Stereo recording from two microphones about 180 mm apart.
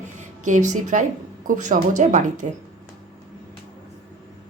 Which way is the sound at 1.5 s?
45° right (ahead or behind).